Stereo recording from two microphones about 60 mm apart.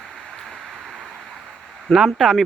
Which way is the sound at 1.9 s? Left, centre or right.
Centre.